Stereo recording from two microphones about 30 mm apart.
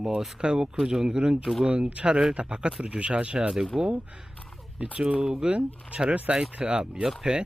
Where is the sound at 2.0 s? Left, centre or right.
Right.